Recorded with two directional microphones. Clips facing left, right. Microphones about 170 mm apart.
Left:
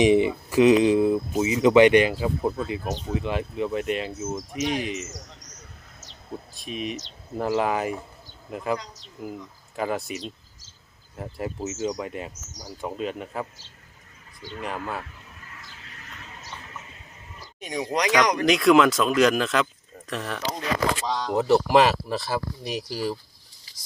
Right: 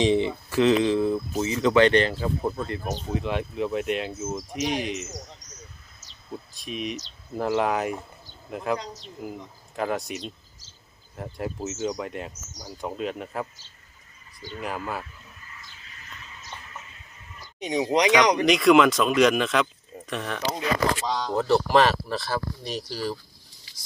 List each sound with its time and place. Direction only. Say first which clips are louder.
0.0 s speech: left 3 dB; 15° left (ahead or behind)
6.5 s speech: even; centre (ahead or behind)
14.6 s speech: even; centre (ahead or behind)
15.4 s a sound: left 2 dB; 65° left (ahead or behind)
17.6 s speech: right 4 dB; 20° right (ahead or behind)
18.4 s speech: left 2 dB; centre (ahead or behind)
21.2 s speech: left 3 dB; 10° left (ahead or behind)